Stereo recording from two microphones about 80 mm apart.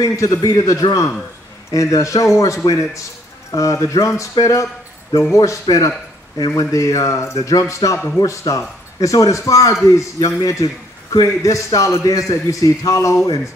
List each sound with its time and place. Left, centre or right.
0.0 s speech: left
0.3 s a man's voice: left